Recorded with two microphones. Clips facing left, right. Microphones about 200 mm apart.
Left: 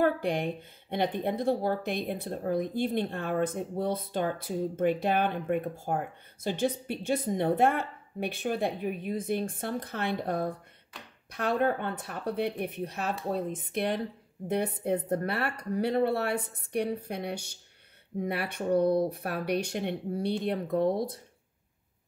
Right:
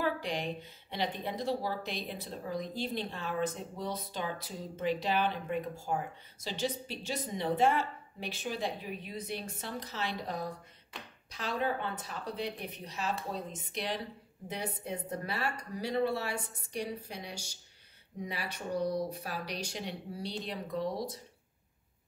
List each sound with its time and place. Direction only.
0.0 s speech: 55° left (ahead or behind)